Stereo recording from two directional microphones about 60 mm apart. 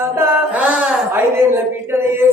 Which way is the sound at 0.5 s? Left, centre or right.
Right.